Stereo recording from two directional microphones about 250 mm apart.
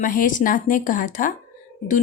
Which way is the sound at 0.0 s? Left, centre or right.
Left.